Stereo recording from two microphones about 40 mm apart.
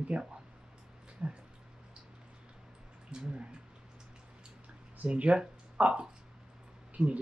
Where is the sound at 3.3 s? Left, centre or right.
Right.